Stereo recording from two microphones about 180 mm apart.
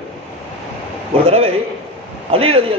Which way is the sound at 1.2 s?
35° right (ahead or behind).